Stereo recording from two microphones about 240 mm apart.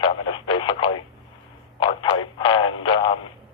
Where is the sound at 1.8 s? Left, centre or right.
Left.